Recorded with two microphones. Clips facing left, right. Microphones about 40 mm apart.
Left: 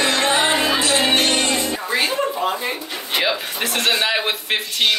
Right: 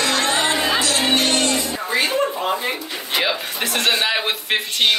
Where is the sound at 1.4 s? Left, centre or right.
Left.